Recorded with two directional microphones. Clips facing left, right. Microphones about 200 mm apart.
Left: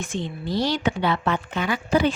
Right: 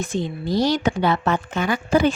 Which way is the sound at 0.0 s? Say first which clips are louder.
Right 4 dB; 40° right (ahead or behind).